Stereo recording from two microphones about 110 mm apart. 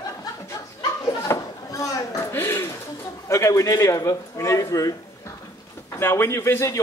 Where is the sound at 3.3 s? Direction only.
25° left (ahead or behind).